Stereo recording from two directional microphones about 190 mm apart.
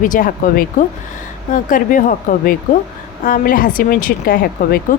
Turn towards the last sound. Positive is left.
turn(degrees=50)  # may be behind; listen again after turning